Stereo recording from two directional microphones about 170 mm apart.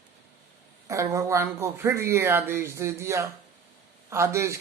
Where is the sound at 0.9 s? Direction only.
20° right (ahead or behind).